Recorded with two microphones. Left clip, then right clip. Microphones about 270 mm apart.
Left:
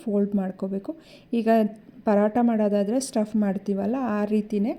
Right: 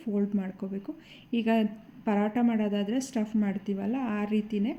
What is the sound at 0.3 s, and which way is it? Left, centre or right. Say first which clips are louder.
Speech: left 6 dB; left.